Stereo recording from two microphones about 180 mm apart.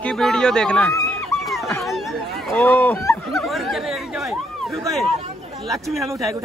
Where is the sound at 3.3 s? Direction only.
Centre (ahead or behind).